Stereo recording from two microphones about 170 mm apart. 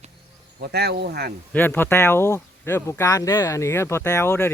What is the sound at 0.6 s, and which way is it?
Insect, 70° right (ahead or behind).